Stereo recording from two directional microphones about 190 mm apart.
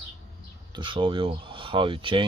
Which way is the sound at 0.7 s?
25° right (ahead or behind).